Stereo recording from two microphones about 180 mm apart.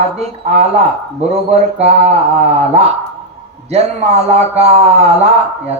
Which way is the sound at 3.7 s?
35° right (ahead or behind).